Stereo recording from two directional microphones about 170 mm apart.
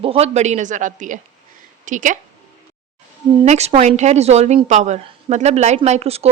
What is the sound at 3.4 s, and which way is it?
Speech, 40° right (ahead or behind).